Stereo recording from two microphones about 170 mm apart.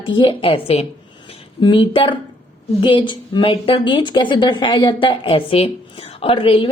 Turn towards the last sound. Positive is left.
turn(degrees=30)  # may be behind; listen again after turning